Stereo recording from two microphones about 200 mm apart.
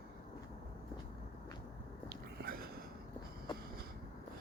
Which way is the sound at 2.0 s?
50° right (ahead or behind).